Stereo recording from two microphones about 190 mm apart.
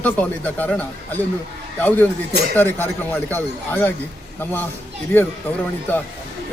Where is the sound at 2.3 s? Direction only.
55° right (ahead or behind).